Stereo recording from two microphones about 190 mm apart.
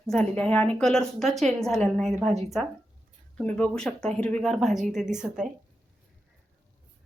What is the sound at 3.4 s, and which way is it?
A woman's voice, 5° left (ahead or behind).